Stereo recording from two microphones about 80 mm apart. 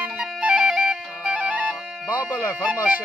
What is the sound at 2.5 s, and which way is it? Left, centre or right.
Speech, centre.